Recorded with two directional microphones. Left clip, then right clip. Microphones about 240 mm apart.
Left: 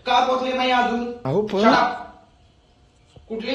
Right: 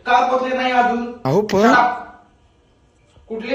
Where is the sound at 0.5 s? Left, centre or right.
Centre.